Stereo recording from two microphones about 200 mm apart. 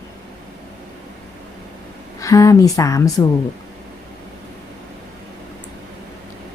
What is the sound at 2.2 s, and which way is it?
Speech, 15° left (ahead or behind).